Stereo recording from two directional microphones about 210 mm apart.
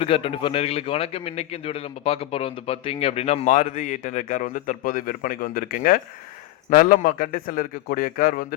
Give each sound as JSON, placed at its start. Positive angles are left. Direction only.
{"t": 0.0, "sound": "a man's voice", "side_deg": 25}